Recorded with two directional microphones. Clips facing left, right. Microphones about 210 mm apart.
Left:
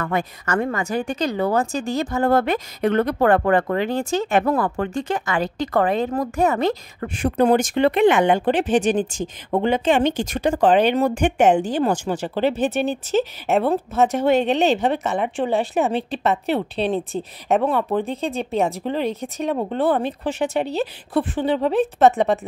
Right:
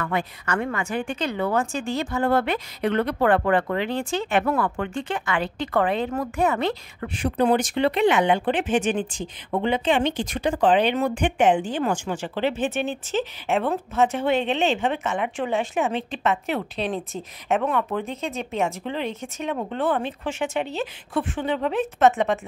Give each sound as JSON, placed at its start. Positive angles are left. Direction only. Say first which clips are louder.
{"t": 0.0, "sound": "a woman's voice", "louder": "left 3 dB", "side_deg": 40}